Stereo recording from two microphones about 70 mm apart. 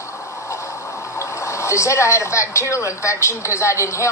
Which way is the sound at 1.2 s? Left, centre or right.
Left.